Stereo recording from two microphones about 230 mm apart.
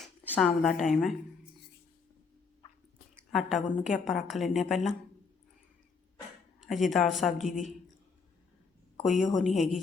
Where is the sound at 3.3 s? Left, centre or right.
Centre.